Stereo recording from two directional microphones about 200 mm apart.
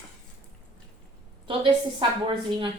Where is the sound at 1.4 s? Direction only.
25° right (ahead or behind).